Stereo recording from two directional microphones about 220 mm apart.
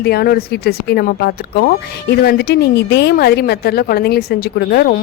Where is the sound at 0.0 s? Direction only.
45° left (ahead or behind).